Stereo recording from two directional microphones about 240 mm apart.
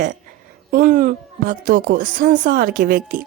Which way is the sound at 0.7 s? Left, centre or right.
Right.